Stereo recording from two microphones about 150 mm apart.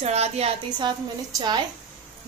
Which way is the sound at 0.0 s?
45° right (ahead or behind).